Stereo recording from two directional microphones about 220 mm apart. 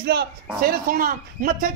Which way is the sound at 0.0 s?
45° right (ahead or behind).